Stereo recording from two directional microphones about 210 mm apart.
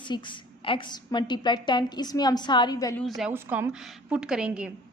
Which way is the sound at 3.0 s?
Centre (ahead or behind).